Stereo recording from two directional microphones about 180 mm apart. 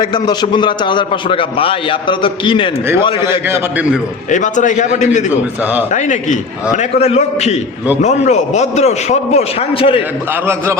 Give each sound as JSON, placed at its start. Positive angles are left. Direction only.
{"t": 0.0, "sound": "a man's voice", "side_deg": 25}
{"t": 3.4, "sound": "a man's voice", "side_deg": -10}
{"t": 4.3, "sound": "a man's voice", "side_deg": 45}
{"t": 5.3, "sound": "a man's voice", "side_deg": -10}
{"t": 5.9, "sound": "a man's voice", "side_deg": 40}
{"t": 10.4, "sound": "a man's voice", "side_deg": -15}